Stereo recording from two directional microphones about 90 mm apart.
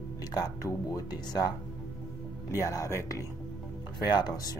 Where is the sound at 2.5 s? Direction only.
35° left (ahead or behind).